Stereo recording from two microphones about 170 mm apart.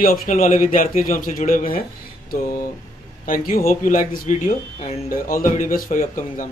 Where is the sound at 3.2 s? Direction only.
55° left (ahead or behind).